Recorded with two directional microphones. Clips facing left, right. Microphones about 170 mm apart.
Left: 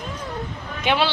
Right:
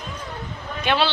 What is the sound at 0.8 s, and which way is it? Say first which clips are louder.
Speech: even; 15° left (ahead or behind).